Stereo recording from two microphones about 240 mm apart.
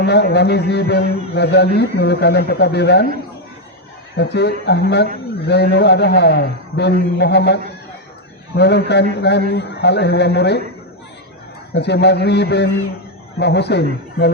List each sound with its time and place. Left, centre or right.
0.0 s a man's voice: left
4.2 s a man's voice: left
11.7 s a man's voice: left